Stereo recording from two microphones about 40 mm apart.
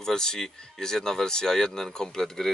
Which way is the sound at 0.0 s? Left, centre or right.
Centre.